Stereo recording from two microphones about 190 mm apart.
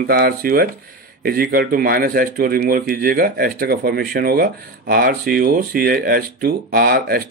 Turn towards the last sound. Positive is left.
turn(degrees=-50)  # may be behind; listen again after turning